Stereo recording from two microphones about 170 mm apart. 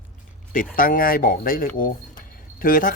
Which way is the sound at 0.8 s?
55° left (ahead or behind).